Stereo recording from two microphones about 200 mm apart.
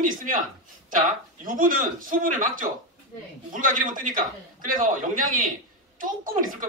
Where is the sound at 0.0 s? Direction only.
40° right (ahead or behind).